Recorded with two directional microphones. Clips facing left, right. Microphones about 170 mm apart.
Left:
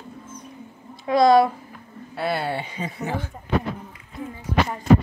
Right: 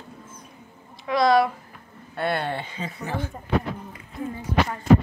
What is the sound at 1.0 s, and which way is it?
Speech, 25° left (ahead or behind).